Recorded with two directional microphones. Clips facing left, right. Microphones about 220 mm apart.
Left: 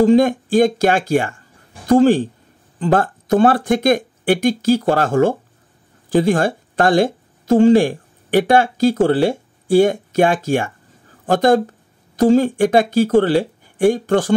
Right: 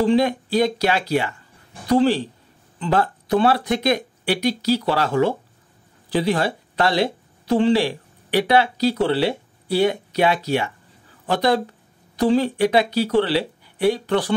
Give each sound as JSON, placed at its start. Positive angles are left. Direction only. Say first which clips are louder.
{"t": 0.0, "sound": "speech", "louder": "left 6 dB", "side_deg": 45}